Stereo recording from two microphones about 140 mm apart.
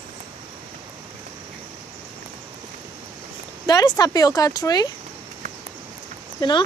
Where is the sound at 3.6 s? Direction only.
30° left (ahead or behind).